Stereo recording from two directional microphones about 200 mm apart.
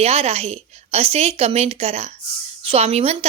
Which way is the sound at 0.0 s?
30° right (ahead or behind).